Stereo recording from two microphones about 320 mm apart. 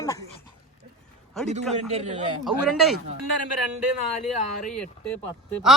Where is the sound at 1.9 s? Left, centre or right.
Right.